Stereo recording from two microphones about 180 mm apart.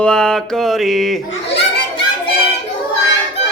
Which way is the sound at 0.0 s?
5° left (ahead or behind).